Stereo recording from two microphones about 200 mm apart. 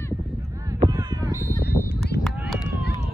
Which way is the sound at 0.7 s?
20° right (ahead or behind).